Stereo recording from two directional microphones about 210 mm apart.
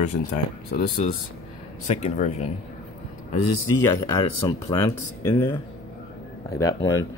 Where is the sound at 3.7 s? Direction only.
15° left (ahead or behind).